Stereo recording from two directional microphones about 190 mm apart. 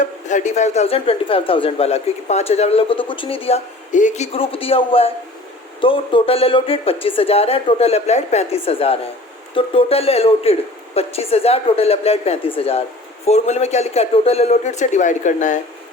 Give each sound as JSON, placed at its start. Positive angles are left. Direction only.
{"t": 0.0, "sound": "a man's voice", "side_deg": 40}